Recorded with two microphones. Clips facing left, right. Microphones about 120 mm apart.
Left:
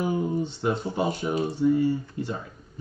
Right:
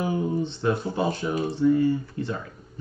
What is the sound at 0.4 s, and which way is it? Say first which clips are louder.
Speech: right 1 dB; 10° left (ahead or behind).